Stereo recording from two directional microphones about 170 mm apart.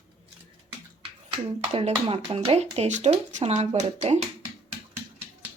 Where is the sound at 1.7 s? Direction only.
35° right (ahead or behind).